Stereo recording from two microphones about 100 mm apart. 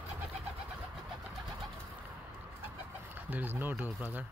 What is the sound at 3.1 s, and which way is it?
Speech, 20° right (ahead or behind).